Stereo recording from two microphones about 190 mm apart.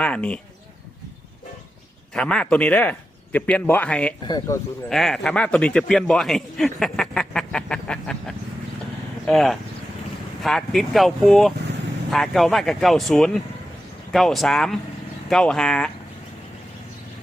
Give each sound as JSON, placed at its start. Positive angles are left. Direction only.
{"t": 0.0, "sound": "a sound", "side_deg": 5}
{"t": 2.1, "sound": "speech", "side_deg": 5}
{"t": 4.2, "sound": "speech", "side_deg": 20}
{"t": 4.9, "sound": "speech", "side_deg": 0}
{"t": 6.7, "sound": "a sound", "side_deg": 0}
{"t": 9.2, "sound": "speech", "side_deg": 0}